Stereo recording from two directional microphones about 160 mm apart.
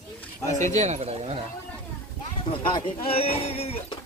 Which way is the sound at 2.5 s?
30° left (ahead or behind).